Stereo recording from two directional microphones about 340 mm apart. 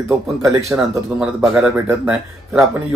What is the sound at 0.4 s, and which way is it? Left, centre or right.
Speech, centre.